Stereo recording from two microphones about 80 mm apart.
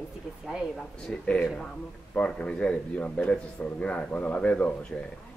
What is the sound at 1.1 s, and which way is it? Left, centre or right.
A man's voice, centre.